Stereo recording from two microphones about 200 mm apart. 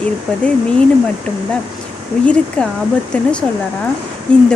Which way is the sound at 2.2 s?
5° left (ahead or behind).